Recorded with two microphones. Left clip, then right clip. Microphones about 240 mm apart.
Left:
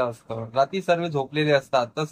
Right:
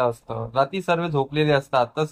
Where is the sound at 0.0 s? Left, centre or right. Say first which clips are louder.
Right 3 dB; centre.